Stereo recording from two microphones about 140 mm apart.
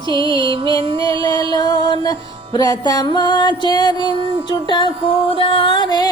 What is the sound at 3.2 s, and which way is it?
Speech, 30° left (ahead or behind).